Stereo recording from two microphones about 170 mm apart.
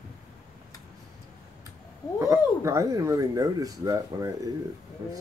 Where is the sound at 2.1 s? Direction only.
15° right (ahead or behind).